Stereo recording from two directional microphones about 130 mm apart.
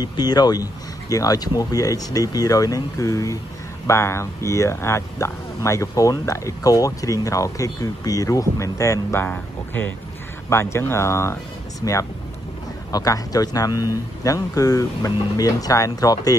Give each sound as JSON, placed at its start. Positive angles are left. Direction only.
{"t": 0.0, "sound": "speech", "side_deg": 30}